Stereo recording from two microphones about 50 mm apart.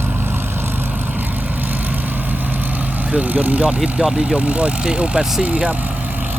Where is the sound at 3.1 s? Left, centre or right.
Right.